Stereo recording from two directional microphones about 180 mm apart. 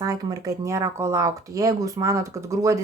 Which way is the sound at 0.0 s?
20° right (ahead or behind).